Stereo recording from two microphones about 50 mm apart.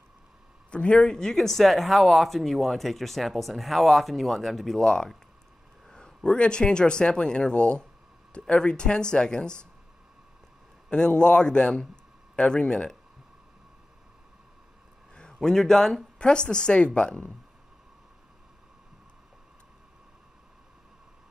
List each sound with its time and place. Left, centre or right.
0.7 s speech: left
1.0 s speech: centre
4.8 s speech: centre
10.9 s a man's voice: centre
15.4 s a woman's voice: centre